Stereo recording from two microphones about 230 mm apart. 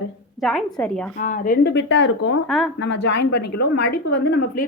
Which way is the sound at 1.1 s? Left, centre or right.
Left.